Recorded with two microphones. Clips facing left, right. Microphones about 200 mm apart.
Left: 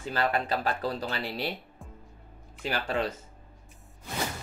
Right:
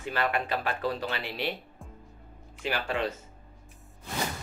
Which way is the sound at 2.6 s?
35° left (ahead or behind).